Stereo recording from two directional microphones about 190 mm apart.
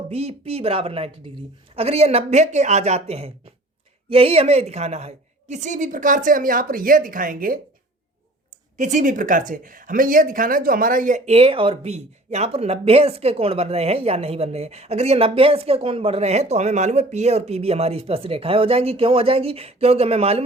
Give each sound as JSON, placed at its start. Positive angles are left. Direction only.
{"t": 0.1, "sound": "a woman's voice", "side_deg": -35}
{"t": 8.8, "sound": "speech", "side_deg": -40}